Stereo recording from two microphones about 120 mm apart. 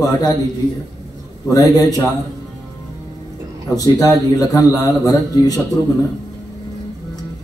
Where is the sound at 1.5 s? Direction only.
30° left (ahead or behind).